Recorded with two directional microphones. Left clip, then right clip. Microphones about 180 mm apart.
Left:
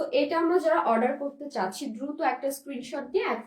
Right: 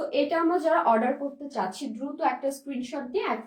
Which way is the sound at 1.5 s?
25° left (ahead or behind).